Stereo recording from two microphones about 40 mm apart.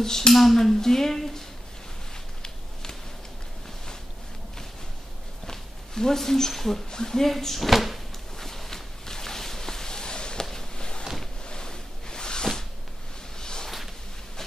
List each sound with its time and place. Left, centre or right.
0.0 s speech: centre
0.3 s speech: centre
2.4 s a sound: centre
5.5 s speech: centre
7.2 s speech: centre
8.4 s a sound: centre